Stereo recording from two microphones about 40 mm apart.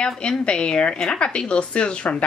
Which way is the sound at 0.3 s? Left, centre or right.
Left.